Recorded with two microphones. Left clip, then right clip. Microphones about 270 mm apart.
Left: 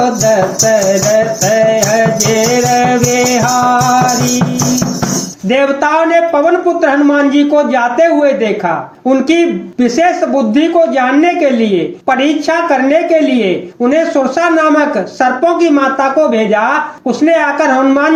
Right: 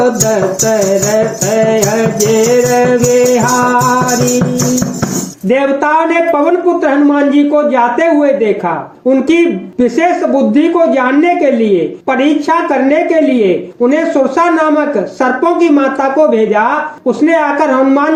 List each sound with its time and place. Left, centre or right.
1.5 s music: centre
5.5 s a sound: centre
6.8 s speech: centre
10.5 s speech: centre
17.1 s speech: centre